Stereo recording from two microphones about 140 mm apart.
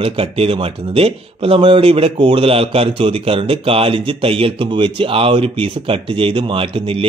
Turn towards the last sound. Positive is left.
turn(degrees=-40)  # may be behind; listen again after turning